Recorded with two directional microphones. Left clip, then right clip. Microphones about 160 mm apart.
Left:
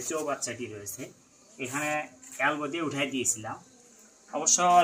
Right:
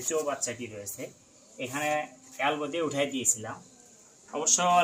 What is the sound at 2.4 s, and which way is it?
Speech, 30° right (ahead or behind).